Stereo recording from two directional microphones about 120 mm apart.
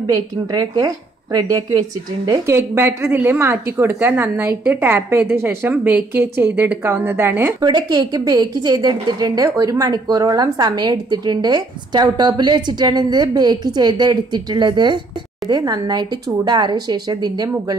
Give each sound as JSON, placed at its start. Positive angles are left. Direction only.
{"t": 0.0, "sound": "a woman's voice", "side_deg": -30}
{"t": 7.6, "sound": "a woman's voice", "side_deg": -35}